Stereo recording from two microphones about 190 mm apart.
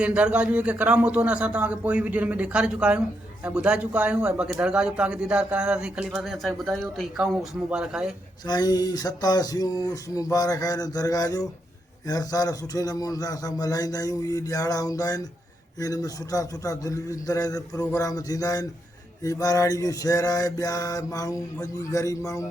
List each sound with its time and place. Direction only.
0.0 s a man's voice: 5° right (ahead or behind)
8.4 s a man's voice: 20° left (ahead or behind)
15.8 s mantra: 20° left (ahead or behind)